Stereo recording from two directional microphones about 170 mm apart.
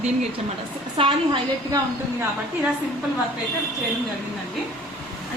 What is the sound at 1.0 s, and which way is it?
Speech, 25° right (ahead or behind).